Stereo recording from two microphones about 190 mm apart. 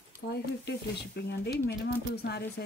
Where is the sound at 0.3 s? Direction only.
60° left (ahead or behind).